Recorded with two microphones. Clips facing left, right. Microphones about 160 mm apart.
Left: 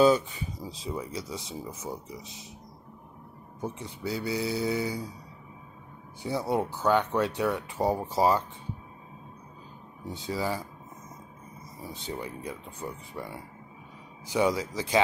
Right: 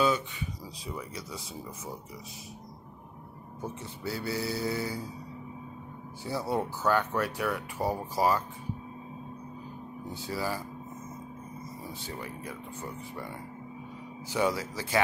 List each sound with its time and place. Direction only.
0.0 s speech: 35° left (ahead or behind)
0.6 s speech: 25° left (ahead or behind)
3.6 s speech: 15° left (ahead or behind)
6.2 s speech: 15° left (ahead or behind)
10.1 s speech: 20° left (ahead or behind)
11.9 s speech: 20° left (ahead or behind)